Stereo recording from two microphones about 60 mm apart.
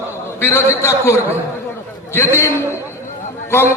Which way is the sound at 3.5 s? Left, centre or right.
Left.